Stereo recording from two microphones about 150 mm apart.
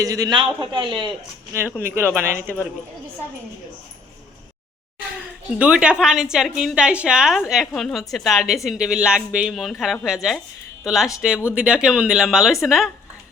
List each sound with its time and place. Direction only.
0.0 s a man's voice: 25° right (ahead or behind)
1.8 s speech: 15° right (ahead or behind)
5.5 s a woman's voice: 10° right (ahead or behind)